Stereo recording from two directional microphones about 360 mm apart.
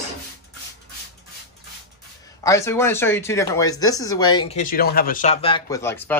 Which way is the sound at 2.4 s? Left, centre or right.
Centre.